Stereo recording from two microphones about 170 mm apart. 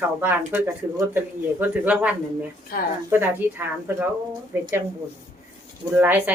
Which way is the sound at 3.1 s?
10° right (ahead or behind).